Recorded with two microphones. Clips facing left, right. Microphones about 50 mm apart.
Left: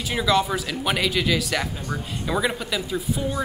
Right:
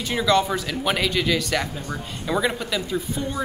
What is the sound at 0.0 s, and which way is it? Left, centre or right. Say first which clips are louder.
Speech: right 1 dB; centre.